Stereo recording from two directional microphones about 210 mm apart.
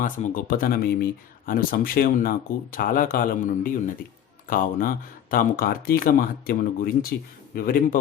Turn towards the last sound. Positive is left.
turn(degrees=40)  # may be behind; listen again after turning